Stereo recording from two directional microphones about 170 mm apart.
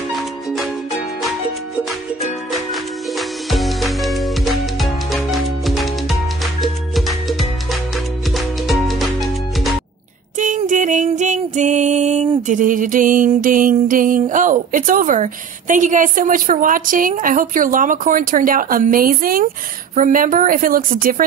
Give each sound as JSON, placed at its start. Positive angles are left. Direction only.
{"t": 0.1, "sound": "music", "side_deg": 0}
{"t": 2.5, "sound": "music", "side_deg": 0}
{"t": 10.3, "sound": "music", "side_deg": -45}
{"t": 12.4, "sound": "a sound", "side_deg": -50}
{"t": 13.4, "sound": "music", "side_deg": -55}
{"t": 14.3, "sound": "a woman's voice", "side_deg": -50}